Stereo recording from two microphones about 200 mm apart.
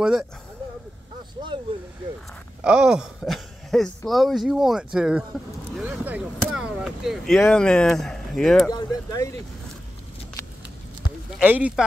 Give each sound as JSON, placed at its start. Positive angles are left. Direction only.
{"t": 2.6, "sound": "speech", "side_deg": -5}
{"t": 8.6, "sound": "speech", "side_deg": 15}
{"t": 11.3, "sound": "speech", "side_deg": -5}